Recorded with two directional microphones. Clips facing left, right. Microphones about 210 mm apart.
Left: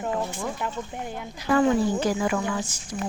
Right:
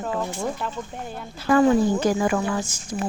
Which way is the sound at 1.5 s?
45° right (ahead or behind).